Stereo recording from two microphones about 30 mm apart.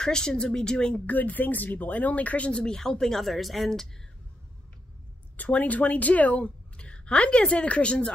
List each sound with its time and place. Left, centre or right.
0.0 s speech: left
1.0 s speech: left
2.5 s speech: left
3.2 s speech: centre
5.5 s speech: left
6.4 s a woman's voice: left